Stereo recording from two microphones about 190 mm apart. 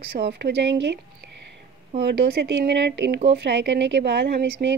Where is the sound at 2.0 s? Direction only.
65° right (ahead or behind).